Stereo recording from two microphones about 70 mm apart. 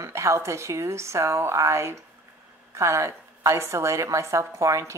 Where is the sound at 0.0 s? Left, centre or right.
Right.